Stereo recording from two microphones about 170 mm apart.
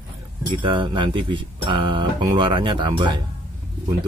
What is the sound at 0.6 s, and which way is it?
Speech, 30° right (ahead or behind).